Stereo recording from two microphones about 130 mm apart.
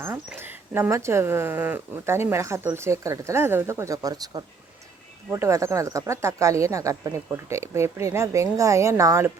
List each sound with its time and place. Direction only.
0.0 s speech: 20° right (ahead or behind)